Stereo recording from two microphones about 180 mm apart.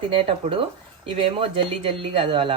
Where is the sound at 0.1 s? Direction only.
30° right (ahead or behind).